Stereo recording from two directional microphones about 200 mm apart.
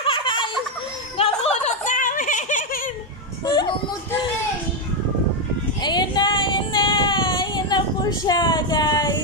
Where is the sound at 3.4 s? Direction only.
20° left (ahead or behind).